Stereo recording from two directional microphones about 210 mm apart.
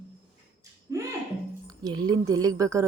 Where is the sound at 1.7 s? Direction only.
20° right (ahead or behind).